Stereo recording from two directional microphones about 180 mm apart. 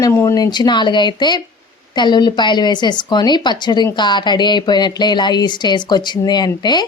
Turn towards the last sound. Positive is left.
turn(degrees=25)  # may be behind; listen again after turning